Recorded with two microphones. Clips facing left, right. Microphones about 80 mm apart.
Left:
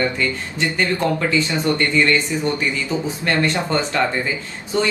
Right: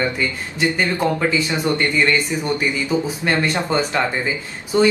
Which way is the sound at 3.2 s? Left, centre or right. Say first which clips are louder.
Even; centre.